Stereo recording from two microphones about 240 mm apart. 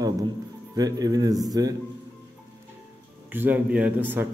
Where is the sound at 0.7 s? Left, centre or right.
Centre.